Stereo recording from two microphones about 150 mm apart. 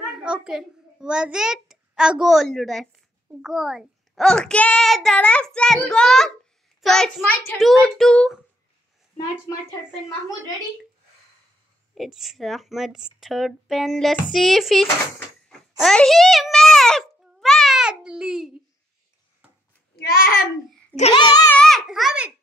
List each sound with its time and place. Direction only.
0.0 s a child's voice: 5° right (ahead or behind)
11.9 s a child's voice: centre (ahead or behind)
15.1 s a sound: 5° left (ahead or behind)
20.0 s a child's voice: 85° left
21.1 s a child's voice: 30° left (ahead or behind)
21.5 s a child's voice: 5° left (ahead or behind)